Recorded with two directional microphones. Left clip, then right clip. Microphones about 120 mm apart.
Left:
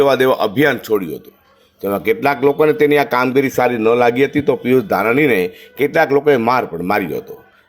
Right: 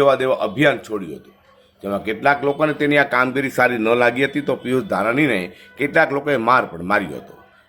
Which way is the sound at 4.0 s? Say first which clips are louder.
Left 4 dB; 35° left (ahead or behind).